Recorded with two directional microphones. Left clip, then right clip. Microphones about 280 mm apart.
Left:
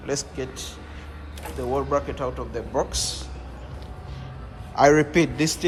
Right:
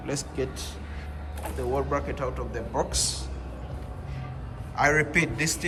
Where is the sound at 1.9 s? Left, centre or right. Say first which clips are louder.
Left 4 dB; centre.